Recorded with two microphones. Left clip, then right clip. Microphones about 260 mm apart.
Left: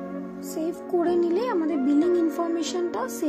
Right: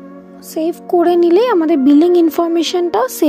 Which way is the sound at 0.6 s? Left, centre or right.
Right.